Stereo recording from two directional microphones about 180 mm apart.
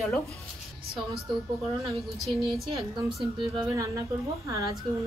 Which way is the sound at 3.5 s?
20° right (ahead or behind).